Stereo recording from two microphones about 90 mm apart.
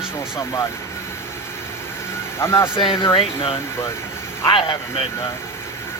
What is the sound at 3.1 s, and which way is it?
Speech, 90° left.